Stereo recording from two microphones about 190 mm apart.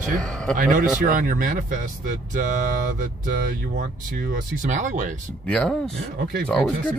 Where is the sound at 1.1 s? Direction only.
45° right (ahead or behind).